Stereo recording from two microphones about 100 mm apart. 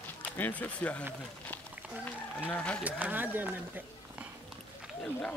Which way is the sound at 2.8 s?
15° right (ahead or behind).